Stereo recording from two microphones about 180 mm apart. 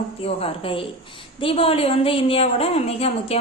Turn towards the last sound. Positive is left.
turn(degrees=35)  # may be behind; listen again after turning